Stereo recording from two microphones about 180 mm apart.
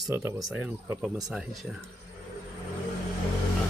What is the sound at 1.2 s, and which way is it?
Speech, centre (ahead or behind).